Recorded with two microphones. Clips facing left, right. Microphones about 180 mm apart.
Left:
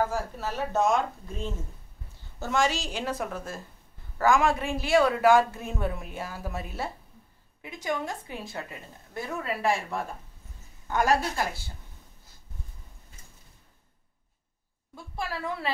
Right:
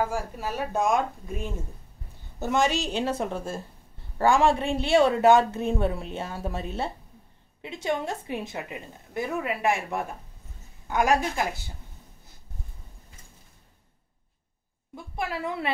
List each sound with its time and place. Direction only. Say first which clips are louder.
0.1 s speech: right 1 dB; 10° right (ahead or behind)
15.1 s speech: right 3 dB; 20° right (ahead or behind)